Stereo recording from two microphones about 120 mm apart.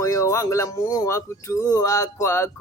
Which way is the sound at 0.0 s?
25° left (ahead or behind).